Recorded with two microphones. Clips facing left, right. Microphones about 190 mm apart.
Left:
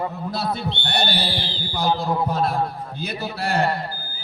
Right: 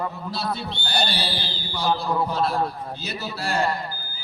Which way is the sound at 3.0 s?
60° left (ahead or behind).